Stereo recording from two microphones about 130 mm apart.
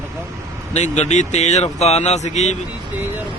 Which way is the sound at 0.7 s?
60° left (ahead or behind).